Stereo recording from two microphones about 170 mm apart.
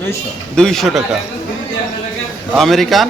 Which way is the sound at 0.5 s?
5° left (ahead or behind).